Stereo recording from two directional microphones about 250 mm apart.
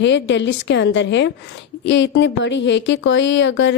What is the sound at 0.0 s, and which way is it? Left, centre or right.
Speech, left.